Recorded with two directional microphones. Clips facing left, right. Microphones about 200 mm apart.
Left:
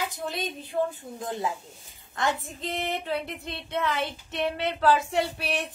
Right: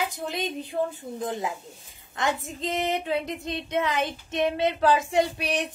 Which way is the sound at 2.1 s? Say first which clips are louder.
Right 1 dB; 20° right (ahead or behind).